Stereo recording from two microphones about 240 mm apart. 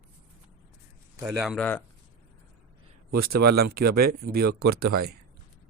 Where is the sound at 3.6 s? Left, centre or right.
Right.